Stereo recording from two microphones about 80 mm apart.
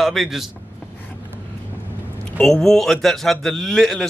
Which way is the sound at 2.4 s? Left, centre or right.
Centre.